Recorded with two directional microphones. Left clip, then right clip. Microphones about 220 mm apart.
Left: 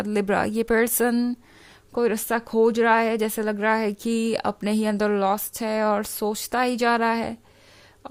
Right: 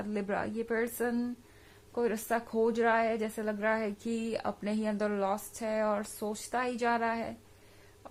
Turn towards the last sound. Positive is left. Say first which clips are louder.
# left 9 dB
turn(degrees=50)  # may be behind; listen again after turning